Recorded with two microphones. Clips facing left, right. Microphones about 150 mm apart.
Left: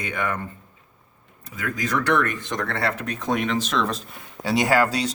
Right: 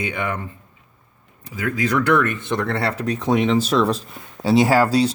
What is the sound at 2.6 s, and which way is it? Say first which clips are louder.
Speech: right 2 dB; 30° right (ahead or behind).